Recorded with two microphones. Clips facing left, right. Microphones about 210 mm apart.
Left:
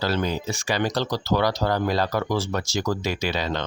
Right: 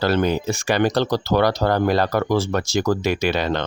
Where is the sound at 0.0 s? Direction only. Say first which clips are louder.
Right 6 dB; 60° right (ahead or behind).